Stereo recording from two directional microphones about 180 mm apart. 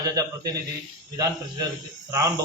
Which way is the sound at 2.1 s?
20° right (ahead or behind).